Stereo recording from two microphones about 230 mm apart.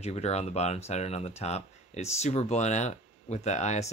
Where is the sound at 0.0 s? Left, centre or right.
Left.